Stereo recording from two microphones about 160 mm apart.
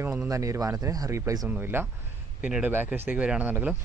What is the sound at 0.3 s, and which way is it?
Speech, 20° right (ahead or behind).